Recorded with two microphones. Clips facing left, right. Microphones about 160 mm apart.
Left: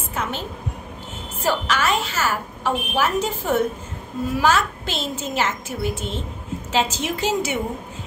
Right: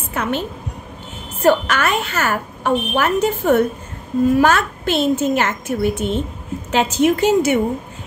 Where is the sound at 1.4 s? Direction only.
55° right (ahead or behind).